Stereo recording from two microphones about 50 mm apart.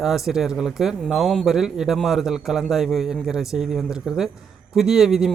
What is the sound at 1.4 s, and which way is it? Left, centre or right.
A man's voice, centre.